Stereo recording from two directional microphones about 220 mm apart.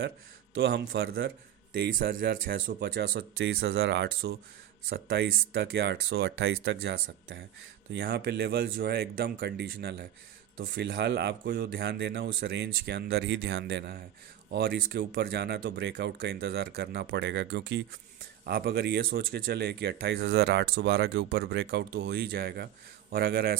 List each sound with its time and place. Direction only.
0.5 s speech: 50° right (ahead or behind)